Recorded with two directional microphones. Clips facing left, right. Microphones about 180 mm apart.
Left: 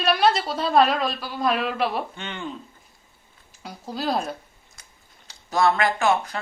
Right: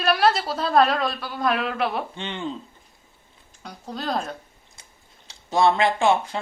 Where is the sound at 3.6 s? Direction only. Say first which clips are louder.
Left 2 dB; 5° left (ahead or behind).